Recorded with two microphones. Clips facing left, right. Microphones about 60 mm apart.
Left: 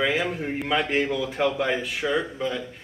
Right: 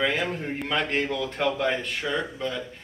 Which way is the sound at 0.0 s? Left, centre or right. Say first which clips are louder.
Left 1 dB; centre.